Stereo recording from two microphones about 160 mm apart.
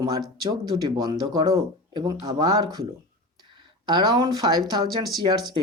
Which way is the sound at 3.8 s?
25° right (ahead or behind).